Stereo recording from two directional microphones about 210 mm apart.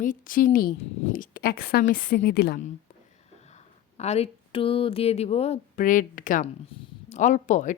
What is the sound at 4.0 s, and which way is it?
Speech, 30° left (ahead or behind).